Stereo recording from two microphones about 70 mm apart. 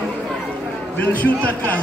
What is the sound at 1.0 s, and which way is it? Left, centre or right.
Speech, left.